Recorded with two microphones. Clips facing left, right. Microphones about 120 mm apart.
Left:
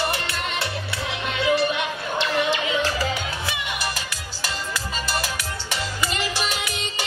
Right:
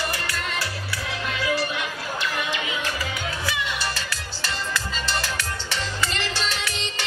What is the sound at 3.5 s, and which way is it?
Music, 15° left (ahead or behind).